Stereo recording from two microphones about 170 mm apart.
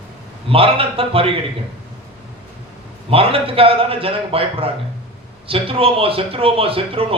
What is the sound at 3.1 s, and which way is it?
A man's voice, 35° right (ahead or behind).